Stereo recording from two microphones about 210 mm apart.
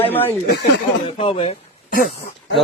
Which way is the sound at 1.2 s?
25° left (ahead or behind).